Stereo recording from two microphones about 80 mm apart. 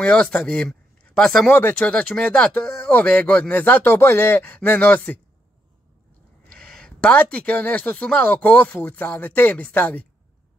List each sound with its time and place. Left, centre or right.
0.0 s speech: centre
1.5 s speech: left
6.5 s speech: centre